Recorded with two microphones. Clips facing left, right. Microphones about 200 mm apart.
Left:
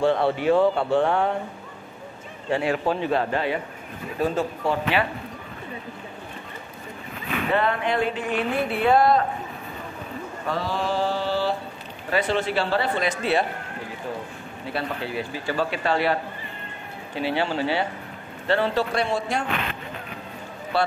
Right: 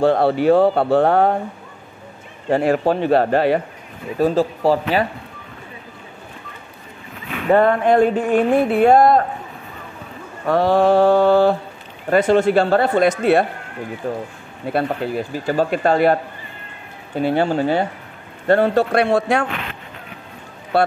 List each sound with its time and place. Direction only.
0.0 s speech: 40° right (ahead or behind)
2.5 s speech: 45° right (ahead or behind)
3.0 s speech: 65° right (ahead or behind)
4.2 s speech: 35° right (ahead or behind)
7.5 s speech: 45° right (ahead or behind)
10.5 s mantra: 60° right (ahead or behind)
12.1 s speech: 45° right (ahead or behind)
18.5 s mantra: 50° right (ahead or behind)
20.7 s speech: 55° right (ahead or behind)